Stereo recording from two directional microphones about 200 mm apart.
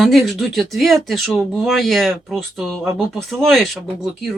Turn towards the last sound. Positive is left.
turn(degrees=0)  # may be behind; listen again after turning